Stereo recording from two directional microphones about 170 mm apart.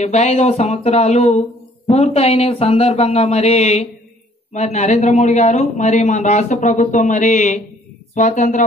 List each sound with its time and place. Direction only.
0.0 s a man's voice: 40° left (ahead or behind)